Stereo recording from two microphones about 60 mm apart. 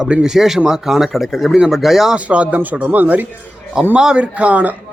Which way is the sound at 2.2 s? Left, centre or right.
Right.